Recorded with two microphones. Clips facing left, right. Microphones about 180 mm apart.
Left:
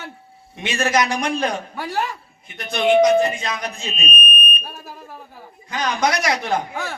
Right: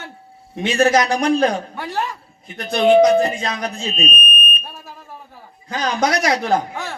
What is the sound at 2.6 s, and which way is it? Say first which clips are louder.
A man's voice: right 3 dB; 35° right (ahead or behind).